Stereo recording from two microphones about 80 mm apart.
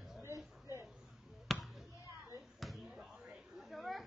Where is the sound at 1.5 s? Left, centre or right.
Centre.